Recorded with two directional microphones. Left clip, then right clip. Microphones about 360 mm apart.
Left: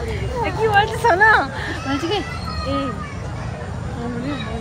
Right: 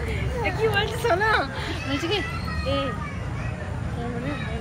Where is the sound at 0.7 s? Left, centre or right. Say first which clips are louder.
Left 8 dB; centre.